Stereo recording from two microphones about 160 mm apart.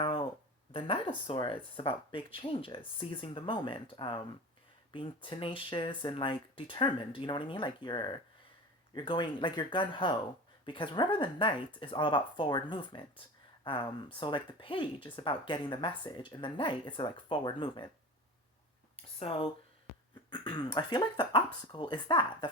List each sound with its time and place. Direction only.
0.7 s speech: 35° left (ahead or behind)
19.0 s a sound: 35° left (ahead or behind)
20.3 s speech: 25° left (ahead or behind)